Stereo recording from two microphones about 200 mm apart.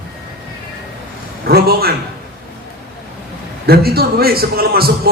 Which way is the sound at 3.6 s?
50° right (ahead or behind).